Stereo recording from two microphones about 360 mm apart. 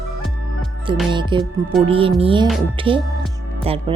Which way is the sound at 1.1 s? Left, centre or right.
Centre.